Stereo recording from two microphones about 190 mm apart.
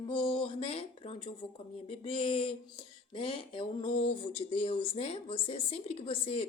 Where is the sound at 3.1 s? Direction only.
25° left (ahead or behind).